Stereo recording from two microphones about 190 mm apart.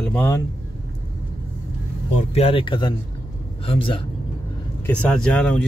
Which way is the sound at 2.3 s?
30° left (ahead or behind).